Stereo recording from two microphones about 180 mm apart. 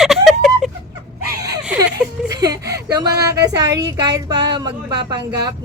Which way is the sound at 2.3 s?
20° right (ahead or behind).